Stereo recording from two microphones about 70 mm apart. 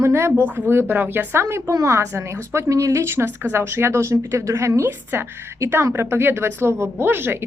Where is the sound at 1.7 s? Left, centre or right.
Right.